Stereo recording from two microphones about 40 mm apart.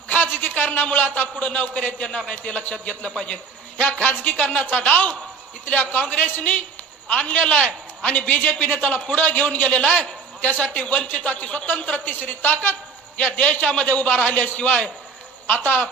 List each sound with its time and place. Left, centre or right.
0.1 s a woman's voice: left
1.5 s a woman's voice: left
2.0 s a man's voice: left
3.8 s a woman's voice: left
8.3 s a woman's voice: left
13.3 s a man's voice: left
13.8 s a woman's voice: left
15.4 s speech: left